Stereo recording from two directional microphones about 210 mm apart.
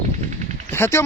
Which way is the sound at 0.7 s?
10° left (ahead or behind).